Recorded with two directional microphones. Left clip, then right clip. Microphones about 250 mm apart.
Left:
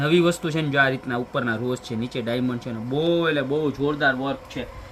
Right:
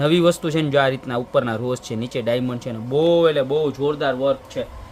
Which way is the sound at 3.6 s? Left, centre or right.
Right.